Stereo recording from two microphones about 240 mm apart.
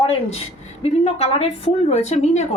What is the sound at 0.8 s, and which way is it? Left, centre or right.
Speech, left.